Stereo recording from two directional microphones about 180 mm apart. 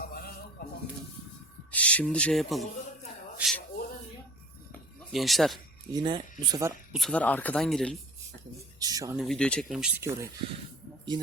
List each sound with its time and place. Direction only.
0.0 s music: 60° left (ahead or behind)
1.7 s speech: 10° left (ahead or behind)
3.3 s a sound: centre (ahead or behind)
4.7 s a sound: centre (ahead or behind)
5.9 s speech: 25° right (ahead or behind)
6.5 s speech: 15° right (ahead or behind)
6.9 s speech: 5° left (ahead or behind)
8.8 s speech: 20° right (ahead or behind)
9.1 s speech: centre (ahead or behind)
10.0 s speech: 15° right (ahead or behind)